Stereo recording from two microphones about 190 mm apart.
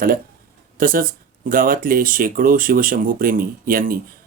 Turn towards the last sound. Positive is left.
turn(degrees=-45)  # may be behind; listen again after turning